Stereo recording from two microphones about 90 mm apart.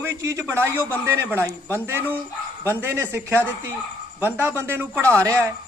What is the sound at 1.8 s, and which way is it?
A man's voice, 25° right (ahead or behind).